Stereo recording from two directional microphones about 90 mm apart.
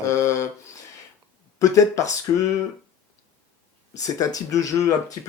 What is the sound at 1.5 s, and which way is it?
Speech, 40° left (ahead or behind).